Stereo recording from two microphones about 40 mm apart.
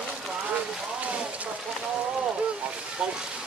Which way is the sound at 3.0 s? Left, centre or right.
Right.